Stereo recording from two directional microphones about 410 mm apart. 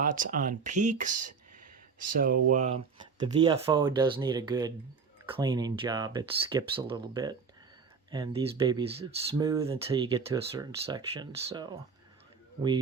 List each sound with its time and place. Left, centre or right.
0.0 s speech: centre